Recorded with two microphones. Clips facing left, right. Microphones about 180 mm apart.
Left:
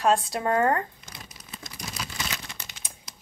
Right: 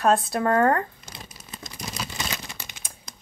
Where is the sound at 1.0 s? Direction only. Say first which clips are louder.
Right 2 dB; 30° right (ahead or behind).